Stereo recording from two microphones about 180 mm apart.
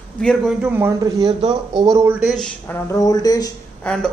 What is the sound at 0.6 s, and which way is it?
A man's voice, 15° right (ahead or behind).